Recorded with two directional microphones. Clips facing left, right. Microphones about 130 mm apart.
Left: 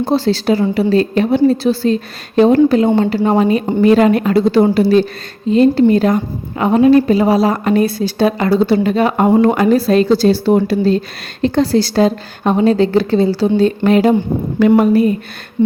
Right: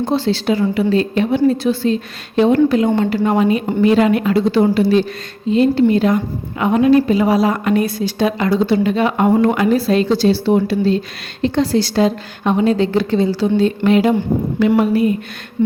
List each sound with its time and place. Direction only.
0.0 s a woman's voice: 35° left (ahead or behind)